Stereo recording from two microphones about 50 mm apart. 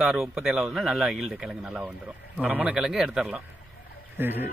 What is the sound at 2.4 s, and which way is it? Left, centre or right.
Speech, right.